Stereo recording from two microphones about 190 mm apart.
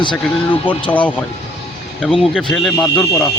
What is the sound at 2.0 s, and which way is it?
Speech, centre (ahead or behind).